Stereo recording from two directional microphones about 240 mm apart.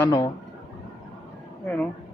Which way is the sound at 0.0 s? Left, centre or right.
Centre.